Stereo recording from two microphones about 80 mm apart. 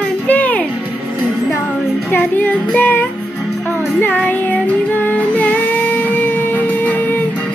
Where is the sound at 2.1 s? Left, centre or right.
Centre.